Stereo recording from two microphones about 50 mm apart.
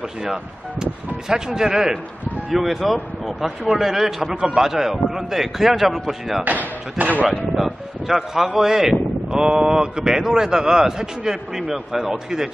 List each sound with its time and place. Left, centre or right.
0.2 s a man's voice: centre
6.4 s speech: right
7.5 s speech: centre